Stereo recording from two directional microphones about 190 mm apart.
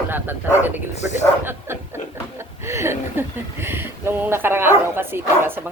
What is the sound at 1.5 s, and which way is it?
Speech, 10° right (ahead or behind).